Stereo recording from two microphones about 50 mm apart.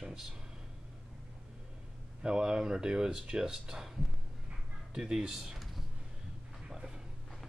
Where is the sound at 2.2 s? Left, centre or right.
Centre.